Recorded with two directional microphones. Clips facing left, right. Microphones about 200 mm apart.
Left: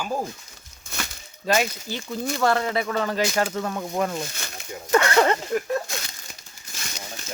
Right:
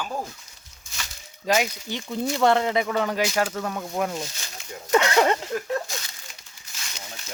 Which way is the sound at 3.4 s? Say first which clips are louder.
Left 1 dB; centre (ahead or behind).